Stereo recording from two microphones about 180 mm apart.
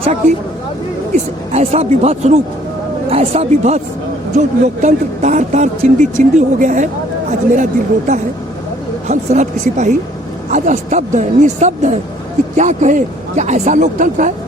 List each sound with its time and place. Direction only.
1.1 s speech: 35° right (ahead or behind)